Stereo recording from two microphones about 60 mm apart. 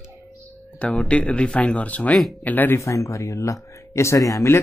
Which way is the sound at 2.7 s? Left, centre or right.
Left.